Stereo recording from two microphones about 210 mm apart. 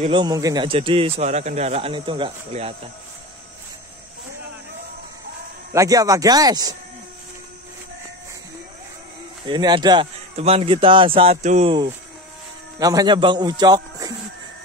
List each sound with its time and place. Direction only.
0.1 s speech: 20° right (ahead or behind)
5.7 s speech: 15° right (ahead or behind)
9.5 s speech: 20° right (ahead or behind)
12.7 s a man's voice: 20° right (ahead or behind)